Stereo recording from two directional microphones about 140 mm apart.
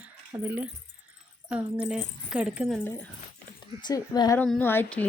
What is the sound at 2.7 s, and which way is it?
Speech, 15° left (ahead or behind).